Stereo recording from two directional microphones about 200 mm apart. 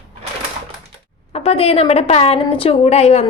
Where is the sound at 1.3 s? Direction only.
30° left (ahead or behind).